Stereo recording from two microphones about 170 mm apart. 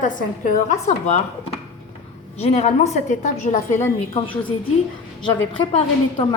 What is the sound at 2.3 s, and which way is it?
A woman's voice, 40° left (ahead or behind).